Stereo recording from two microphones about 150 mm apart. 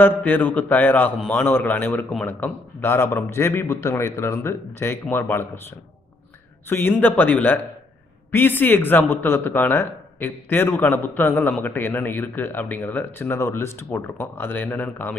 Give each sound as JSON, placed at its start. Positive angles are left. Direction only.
{"t": 0.0, "sound": "a man's voice", "side_deg": 10}
{"t": 6.7, "sound": "a man's voice", "side_deg": 15}